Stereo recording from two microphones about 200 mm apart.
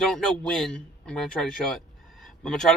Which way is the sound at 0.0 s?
5° left (ahead or behind).